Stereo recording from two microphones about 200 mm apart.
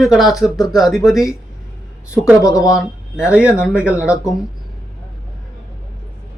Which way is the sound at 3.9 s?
5° right (ahead or behind).